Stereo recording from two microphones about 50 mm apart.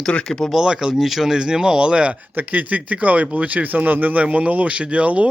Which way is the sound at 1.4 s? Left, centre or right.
Centre.